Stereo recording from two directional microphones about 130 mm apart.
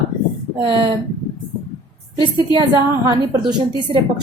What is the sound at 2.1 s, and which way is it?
Speech, 35° right (ahead or behind).